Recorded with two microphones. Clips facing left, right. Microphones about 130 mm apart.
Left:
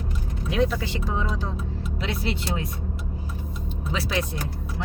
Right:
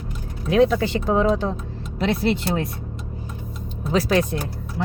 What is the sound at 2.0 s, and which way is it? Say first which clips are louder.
Speech: right 9 dB; 50° right (ahead or behind).